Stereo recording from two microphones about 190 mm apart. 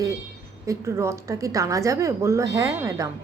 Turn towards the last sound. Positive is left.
turn(degrees=-15)  # may be behind; listen again after turning